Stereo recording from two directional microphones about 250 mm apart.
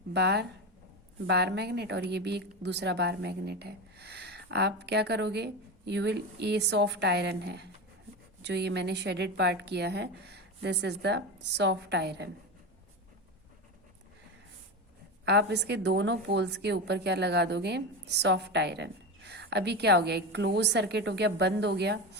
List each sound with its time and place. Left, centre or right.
0.1 s a woman's voice: right
15.2 s a woman's voice: right